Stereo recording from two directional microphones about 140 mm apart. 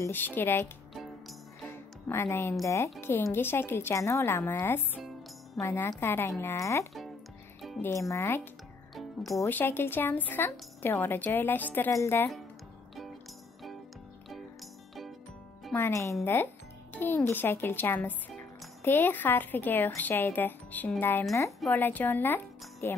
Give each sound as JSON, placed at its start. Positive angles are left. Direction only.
{"t": 0.0, "sound": "speech", "side_deg": 15}
{"t": 1.7, "sound": "music", "side_deg": 15}
{"t": 2.6, "sound": "speech", "side_deg": 20}
{"t": 8.9, "sound": "speech", "side_deg": 0}
{"t": 9.4, "sound": "speech", "side_deg": 15}
{"t": 15.7, "sound": "speech", "side_deg": 20}